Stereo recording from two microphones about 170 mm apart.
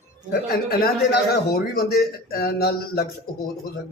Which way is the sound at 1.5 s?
65° left (ahead or behind).